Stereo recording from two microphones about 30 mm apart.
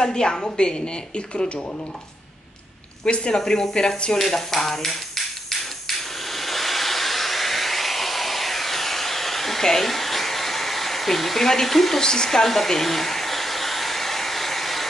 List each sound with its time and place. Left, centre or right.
0.0 s a woman's voice: left
3.3 s a woman's voice: left
4.2 s a sound: centre
9.6 s hair dryer: centre
11.4 s speech: centre
12.0 s a woman's voice: left
12.3 s hair dryer: centre